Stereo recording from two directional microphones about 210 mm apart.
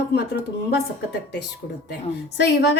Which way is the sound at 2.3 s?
55° left (ahead or behind).